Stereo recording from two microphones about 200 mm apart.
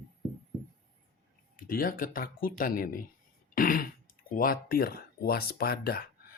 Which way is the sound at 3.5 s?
45° left (ahead or behind).